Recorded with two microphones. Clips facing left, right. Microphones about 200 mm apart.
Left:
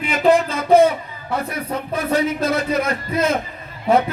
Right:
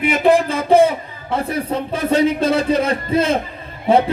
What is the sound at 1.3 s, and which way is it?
A man's voice, 30° right (ahead or behind).